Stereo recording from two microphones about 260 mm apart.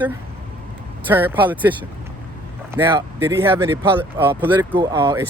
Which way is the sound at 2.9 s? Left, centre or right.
Centre.